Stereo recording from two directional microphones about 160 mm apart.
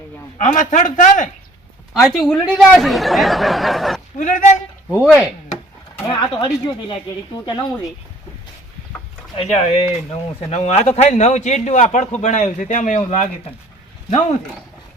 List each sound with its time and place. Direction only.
0.3 s speech: 50° left (ahead or behind)
1.9 s speech: centre (ahead or behind)
4.2 s speech: 50° left (ahead or behind)
4.9 s speech: 5° right (ahead or behind)
6.1 s speech: 30° left (ahead or behind)
9.4 s speech: 40° left (ahead or behind)